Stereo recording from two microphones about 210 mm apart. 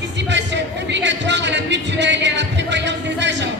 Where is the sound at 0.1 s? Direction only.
55° right (ahead or behind).